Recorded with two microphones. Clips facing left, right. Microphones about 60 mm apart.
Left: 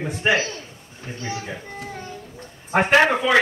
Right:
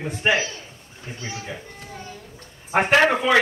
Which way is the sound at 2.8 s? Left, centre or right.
Centre.